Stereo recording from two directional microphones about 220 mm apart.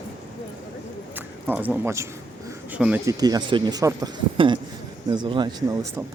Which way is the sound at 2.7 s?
5° right (ahead or behind).